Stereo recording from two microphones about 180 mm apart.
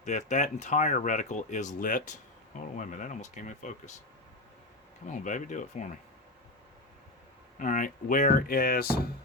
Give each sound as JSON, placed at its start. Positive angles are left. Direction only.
{"t": 0.0, "sound": "speech", "side_deg": 45}
{"t": 5.1, "sound": "speech", "side_deg": 45}
{"t": 7.6, "sound": "speech", "side_deg": 45}